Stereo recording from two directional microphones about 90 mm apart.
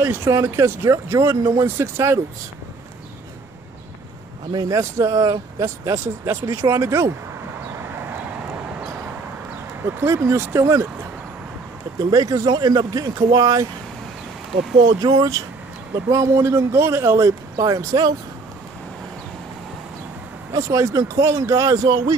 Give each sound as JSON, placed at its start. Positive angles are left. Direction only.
{"t": 0.0, "sound": "speech", "side_deg": -30}
{"t": 4.5, "sound": "speech", "side_deg": -45}
{"t": 6.5, "sound": "speech", "side_deg": -30}
{"t": 9.8, "sound": "speech", "side_deg": -30}
{"t": 12.0, "sound": "speech", "side_deg": -40}
{"t": 14.9, "sound": "speech", "side_deg": -45}
{"t": 17.6, "sound": "speech", "side_deg": -40}
{"t": 20.5, "sound": "speech", "side_deg": -35}
{"t": 21.8, "sound": "speech", "side_deg": -45}